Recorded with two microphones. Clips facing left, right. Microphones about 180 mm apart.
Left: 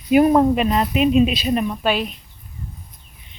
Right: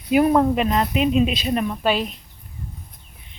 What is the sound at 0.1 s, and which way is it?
Speech, 20° left (ahead or behind).